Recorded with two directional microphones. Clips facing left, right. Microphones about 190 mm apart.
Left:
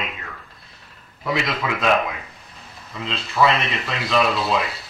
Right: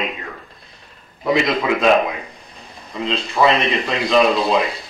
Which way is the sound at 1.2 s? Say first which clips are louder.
Right 6 dB; 20° right (ahead or behind).